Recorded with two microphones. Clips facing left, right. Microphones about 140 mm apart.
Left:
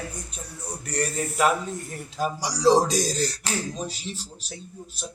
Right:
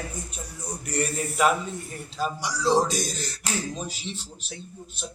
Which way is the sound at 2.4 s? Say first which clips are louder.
Left 4 dB; 35° left (ahead or behind).